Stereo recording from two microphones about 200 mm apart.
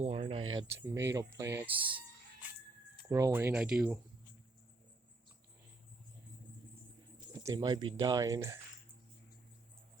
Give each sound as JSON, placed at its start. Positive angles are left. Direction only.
{"t": 0.0, "sound": "speech", "side_deg": -30}
{"t": 0.5, "sound": "speech", "side_deg": -15}
{"t": 1.8, "sound": "speech", "side_deg": -25}
{"t": 2.4, "sound": "a sound", "side_deg": -5}
{"t": 3.1, "sound": "speech", "side_deg": -15}
{"t": 7.4, "sound": "speech", "side_deg": -20}